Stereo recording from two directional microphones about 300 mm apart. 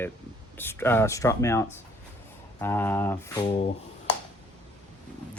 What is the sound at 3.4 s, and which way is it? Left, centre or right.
Speech, centre.